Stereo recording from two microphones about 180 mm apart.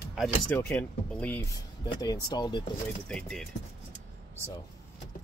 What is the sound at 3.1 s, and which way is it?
Speech, 5° left (ahead or behind).